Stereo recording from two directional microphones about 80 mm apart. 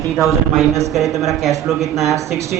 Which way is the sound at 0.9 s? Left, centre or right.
Centre.